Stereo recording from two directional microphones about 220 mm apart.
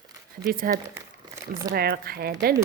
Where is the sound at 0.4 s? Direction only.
40° right (ahead or behind).